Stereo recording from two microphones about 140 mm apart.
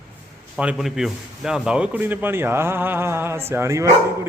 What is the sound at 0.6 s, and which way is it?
A man's voice, 5° right (ahead or behind).